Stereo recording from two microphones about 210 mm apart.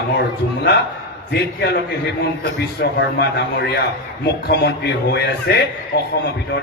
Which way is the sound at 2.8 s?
55° left (ahead or behind).